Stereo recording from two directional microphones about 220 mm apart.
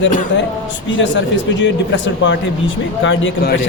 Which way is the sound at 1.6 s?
55° left (ahead or behind).